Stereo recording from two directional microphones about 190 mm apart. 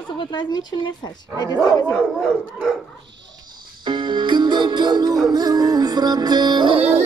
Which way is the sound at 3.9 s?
25° right (ahead or behind).